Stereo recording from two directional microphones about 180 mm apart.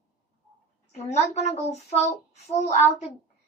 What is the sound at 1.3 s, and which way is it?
A woman's voice, 40° left (ahead or behind).